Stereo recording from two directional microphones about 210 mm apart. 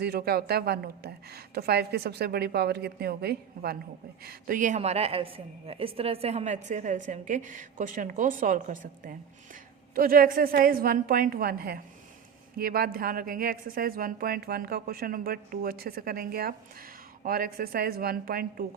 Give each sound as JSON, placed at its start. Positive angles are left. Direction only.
{"t": 0.0, "sound": "a woman's voice", "side_deg": -50}